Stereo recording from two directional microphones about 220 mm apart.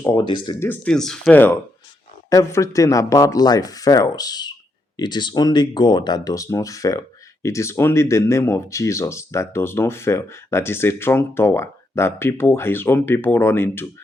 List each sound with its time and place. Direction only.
0.0 s speech: 15° left (ahead or behind)
0.7 s speech: 5° left (ahead or behind)